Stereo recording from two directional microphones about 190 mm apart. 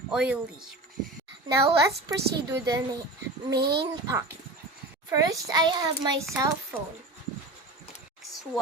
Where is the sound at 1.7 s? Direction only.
15° right (ahead or behind).